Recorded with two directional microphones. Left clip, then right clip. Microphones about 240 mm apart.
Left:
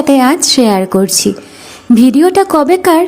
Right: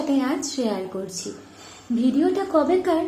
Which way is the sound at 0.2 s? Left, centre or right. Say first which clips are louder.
Left 16 dB; left.